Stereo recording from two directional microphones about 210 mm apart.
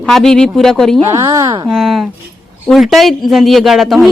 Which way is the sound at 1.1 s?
15° right (ahead or behind).